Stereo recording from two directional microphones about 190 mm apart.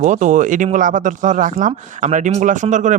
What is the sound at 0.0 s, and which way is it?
Speech, 40° right (ahead or behind).